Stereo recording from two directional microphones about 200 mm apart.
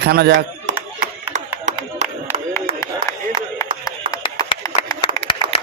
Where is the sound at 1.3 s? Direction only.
35° right (ahead or behind).